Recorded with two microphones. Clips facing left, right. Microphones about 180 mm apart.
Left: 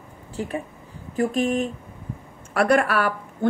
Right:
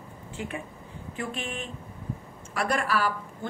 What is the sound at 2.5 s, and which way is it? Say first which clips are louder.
Speech: left 8 dB; 60° left (ahead or behind).